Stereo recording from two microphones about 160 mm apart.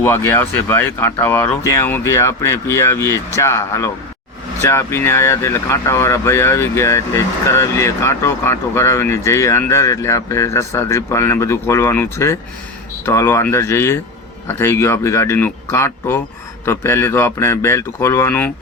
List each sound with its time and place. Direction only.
0.0 s speech: 15° left (ahead or behind)